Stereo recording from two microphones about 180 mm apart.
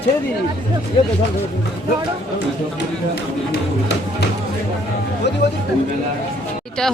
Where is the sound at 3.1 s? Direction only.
65° left (ahead or behind).